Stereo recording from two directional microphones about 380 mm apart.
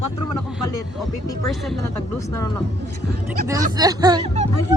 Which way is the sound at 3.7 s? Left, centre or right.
Centre.